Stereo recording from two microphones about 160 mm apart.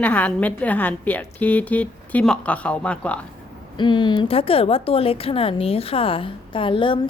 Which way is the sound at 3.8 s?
30° left (ahead or behind).